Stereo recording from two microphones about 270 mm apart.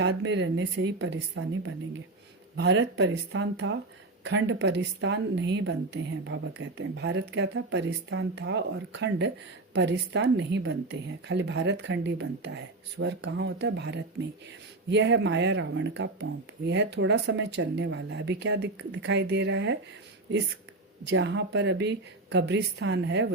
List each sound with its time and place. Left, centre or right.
0.0 s speech: right
21.1 s speech: right